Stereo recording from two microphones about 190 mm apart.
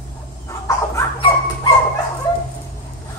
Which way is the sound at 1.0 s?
25° left (ahead or behind).